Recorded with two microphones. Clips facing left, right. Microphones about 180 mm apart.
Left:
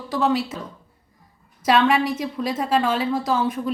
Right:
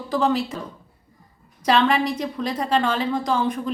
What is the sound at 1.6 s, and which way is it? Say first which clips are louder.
A woman's voice: left 1 dB; 5° left (ahead or behind).